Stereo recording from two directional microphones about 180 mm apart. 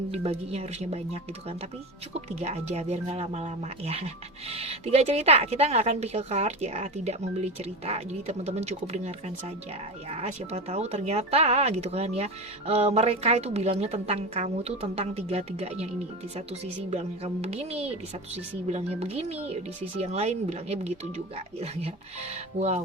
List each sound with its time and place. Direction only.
0.1 s speech: 35° right (ahead or behind)
16.9 s speech: 35° right (ahead or behind)